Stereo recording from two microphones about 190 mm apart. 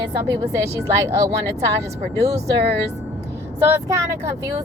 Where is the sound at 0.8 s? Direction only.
15° right (ahead or behind).